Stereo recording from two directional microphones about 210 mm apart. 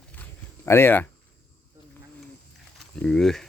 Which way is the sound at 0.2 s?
10° left (ahead or behind).